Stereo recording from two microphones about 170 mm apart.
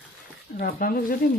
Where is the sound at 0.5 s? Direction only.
60° left (ahead or behind).